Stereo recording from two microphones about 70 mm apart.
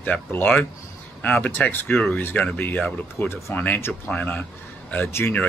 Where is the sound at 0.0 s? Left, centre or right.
Left.